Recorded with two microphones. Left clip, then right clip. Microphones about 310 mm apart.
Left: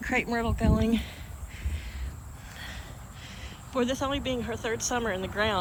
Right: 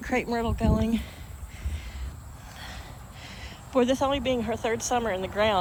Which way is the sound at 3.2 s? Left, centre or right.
Centre.